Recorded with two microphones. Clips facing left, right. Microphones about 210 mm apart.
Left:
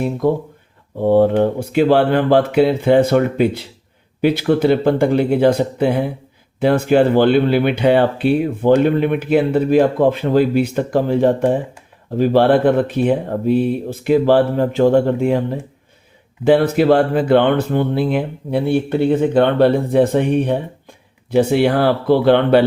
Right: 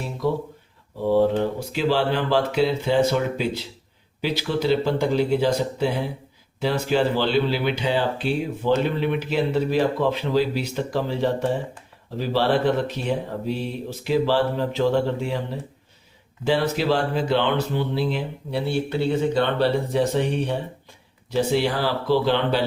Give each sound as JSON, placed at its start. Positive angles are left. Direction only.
{"t": 0.0, "sound": "speech", "side_deg": 50}